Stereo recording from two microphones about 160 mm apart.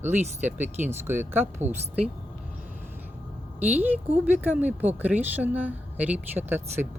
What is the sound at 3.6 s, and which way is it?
A woman's voice, 10° right (ahead or behind).